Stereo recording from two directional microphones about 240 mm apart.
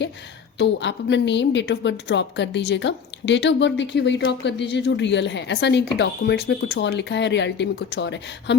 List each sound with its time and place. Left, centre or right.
0.6 s a woman's voice: left